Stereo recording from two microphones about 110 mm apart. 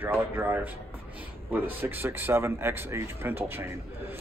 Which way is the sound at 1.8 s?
20° right (ahead or behind).